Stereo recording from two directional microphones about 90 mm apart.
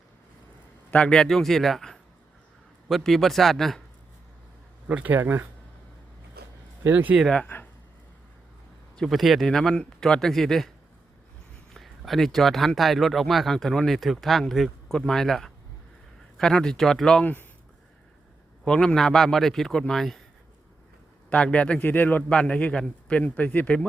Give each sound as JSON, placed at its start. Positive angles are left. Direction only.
{"t": 0.9, "sound": "speech", "side_deg": 15}
{"t": 4.9, "sound": "speech", "side_deg": -15}
{"t": 6.9, "sound": "speech", "side_deg": -15}
{"t": 7.3, "sound": "speech", "side_deg": 20}
{"t": 9.0, "sound": "speech", "side_deg": 0}
{"t": 11.7, "sound": "a man's voice", "side_deg": 0}
{"t": 18.6, "sound": "speech", "side_deg": 10}
{"t": 21.2, "sound": "a man's voice", "side_deg": 10}